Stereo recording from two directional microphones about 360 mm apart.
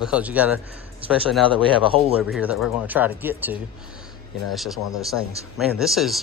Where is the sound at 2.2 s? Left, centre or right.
Centre.